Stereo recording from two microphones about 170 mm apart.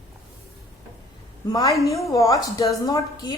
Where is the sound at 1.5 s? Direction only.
20° left (ahead or behind).